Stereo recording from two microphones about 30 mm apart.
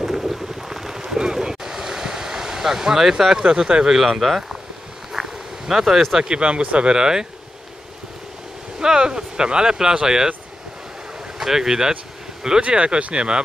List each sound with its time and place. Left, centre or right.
0.0 s boat: centre
3.4 s speech: right
3.9 s speech: centre
5.1 s a sound: centre
6.2 s speech: right
6.8 s speech: right
8.7 s speech: right
11.3 s speech: centre
12.6 s speech: right